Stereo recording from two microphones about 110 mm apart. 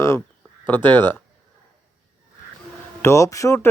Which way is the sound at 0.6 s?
15° left (ahead or behind).